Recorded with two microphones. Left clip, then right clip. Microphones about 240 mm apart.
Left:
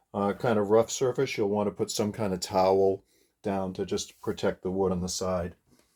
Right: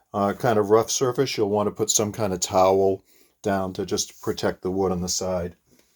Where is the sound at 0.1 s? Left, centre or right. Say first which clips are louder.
Right 5 dB; right.